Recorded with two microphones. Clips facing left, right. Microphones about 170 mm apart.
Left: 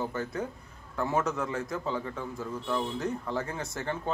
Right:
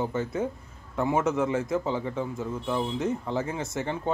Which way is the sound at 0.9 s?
20° right (ahead or behind).